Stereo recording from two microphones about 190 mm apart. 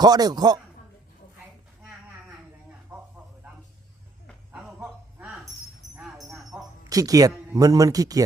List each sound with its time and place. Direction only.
0.0 s a man's voice: 20° right (ahead or behind)
4.5 s a sound: 5° right (ahead or behind)
6.8 s a man's voice: 20° right (ahead or behind)